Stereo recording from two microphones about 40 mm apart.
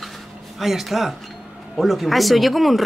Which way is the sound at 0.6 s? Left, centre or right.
Centre.